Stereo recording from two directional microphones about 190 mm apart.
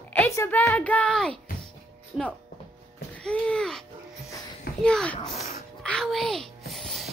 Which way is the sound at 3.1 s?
5° left (ahead or behind).